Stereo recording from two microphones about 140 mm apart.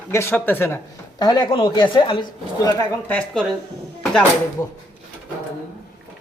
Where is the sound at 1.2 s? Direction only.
30° left (ahead or behind).